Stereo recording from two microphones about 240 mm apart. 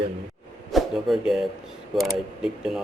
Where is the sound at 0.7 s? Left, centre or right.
Centre.